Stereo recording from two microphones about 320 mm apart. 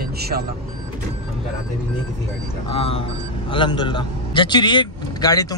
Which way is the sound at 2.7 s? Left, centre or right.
Centre.